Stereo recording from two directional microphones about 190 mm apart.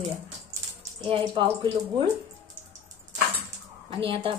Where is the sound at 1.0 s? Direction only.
25° right (ahead or behind).